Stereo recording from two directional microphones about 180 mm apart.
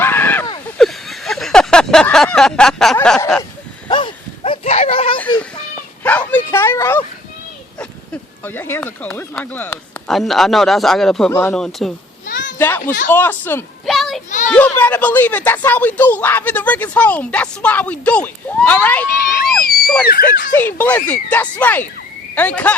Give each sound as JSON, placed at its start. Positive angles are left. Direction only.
{"t": 0.0, "sound": "a sound", "side_deg": 10}
{"t": 3.8, "sound": "a sound", "side_deg": 25}
{"t": 6.0, "sound": "bow-wow", "side_deg": 10}
{"t": 7.8, "sound": "speech", "side_deg": 10}
{"t": 12.8, "sound": "speech", "side_deg": 45}
{"t": 13.1, "sound": "speech", "side_deg": 10}
{"t": 13.8, "sound": "a sound", "side_deg": 0}
{"t": 14.3, "sound": "children playing", "side_deg": 45}
{"t": 14.5, "sound": "speech", "side_deg": 10}
{"t": 19.6, "sound": "screaming", "side_deg": 55}
{"t": 20.1, "sound": "speech", "side_deg": 55}
{"t": 20.6, "sound": "speech", "side_deg": 10}